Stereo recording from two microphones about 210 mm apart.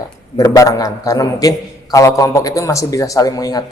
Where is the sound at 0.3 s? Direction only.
15° left (ahead or behind).